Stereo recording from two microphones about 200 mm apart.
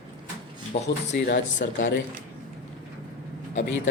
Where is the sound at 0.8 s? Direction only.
55° left (ahead or behind).